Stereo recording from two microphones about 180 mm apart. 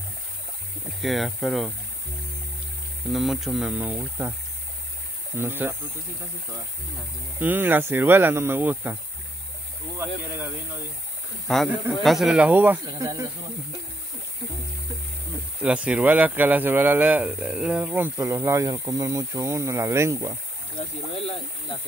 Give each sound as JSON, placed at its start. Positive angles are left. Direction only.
{"t": 1.0, "sound": "speech", "side_deg": 0}
{"t": 3.1, "sound": "speech", "side_deg": 0}
{"t": 5.3, "sound": "speech", "side_deg": -15}
{"t": 7.3, "sound": "speech", "side_deg": -10}
{"t": 9.9, "sound": "speech", "side_deg": -10}
{"t": 11.4, "sound": "speech", "side_deg": 0}
{"t": 12.8, "sound": "speech", "side_deg": -20}
{"t": 15.6, "sound": "speech", "side_deg": -5}